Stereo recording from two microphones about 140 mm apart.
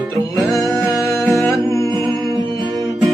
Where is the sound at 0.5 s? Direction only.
25° left (ahead or behind).